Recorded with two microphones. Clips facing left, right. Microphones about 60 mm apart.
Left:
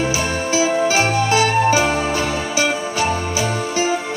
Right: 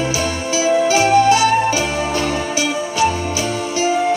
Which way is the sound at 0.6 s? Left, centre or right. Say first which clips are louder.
Right 3 dB; left.